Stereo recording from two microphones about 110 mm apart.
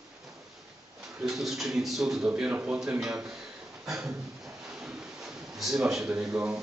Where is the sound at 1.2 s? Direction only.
5° right (ahead or behind).